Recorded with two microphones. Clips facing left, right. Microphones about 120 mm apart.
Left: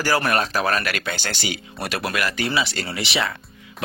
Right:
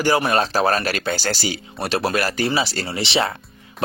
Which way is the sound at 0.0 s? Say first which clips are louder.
Right 3 dB; 20° right (ahead or behind).